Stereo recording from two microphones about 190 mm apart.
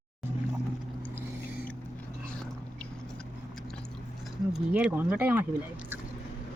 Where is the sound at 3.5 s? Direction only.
Centre (ahead or behind).